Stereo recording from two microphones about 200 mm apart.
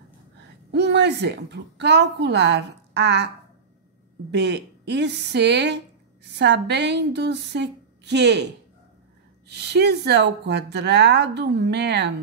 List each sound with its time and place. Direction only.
0.7 s a woman's voice: 60° right (ahead or behind)
4.3 s a woman's voice: 60° right (ahead or behind)
9.5 s a woman's voice: 55° right (ahead or behind)